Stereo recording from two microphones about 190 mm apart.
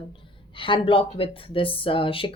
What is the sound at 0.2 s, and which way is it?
Speech, 25° left (ahead or behind).